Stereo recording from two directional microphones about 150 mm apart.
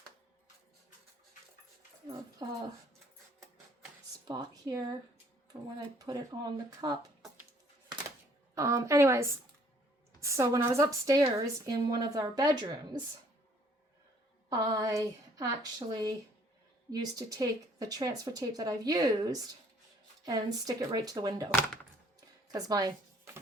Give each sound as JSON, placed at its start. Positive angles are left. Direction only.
{"t": 4.3, "sound": "speech", "side_deg": -25}
{"t": 6.0, "sound": "speech", "side_deg": -25}
{"t": 8.5, "sound": "a woman's voice", "side_deg": -20}
{"t": 14.5, "sound": "speech", "side_deg": -25}
{"t": 22.5, "sound": "speech", "side_deg": -25}